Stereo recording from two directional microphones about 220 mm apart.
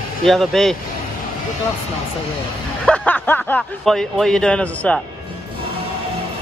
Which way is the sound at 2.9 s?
5° left (ahead or behind).